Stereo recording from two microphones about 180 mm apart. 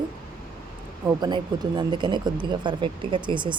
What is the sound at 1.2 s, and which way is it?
Speech, 25° right (ahead or behind).